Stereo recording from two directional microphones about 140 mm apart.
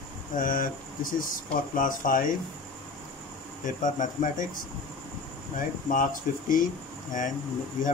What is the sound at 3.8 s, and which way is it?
Speech, 65° left (ahead or behind).